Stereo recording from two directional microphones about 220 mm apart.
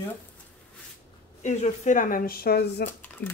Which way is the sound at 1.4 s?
35° left (ahead or behind).